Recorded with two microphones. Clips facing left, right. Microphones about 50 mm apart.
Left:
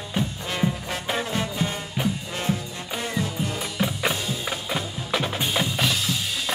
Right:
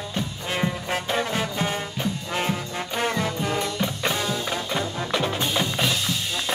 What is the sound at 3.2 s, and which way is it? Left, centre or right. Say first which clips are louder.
Music: right 2 dB; right.